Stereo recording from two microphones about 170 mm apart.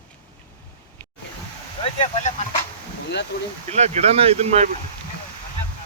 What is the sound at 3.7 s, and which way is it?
Speech, 40° right (ahead or behind).